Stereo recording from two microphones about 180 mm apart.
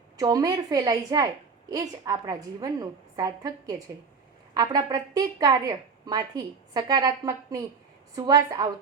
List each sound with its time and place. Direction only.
0.2 s a woman's voice: 20° right (ahead or behind)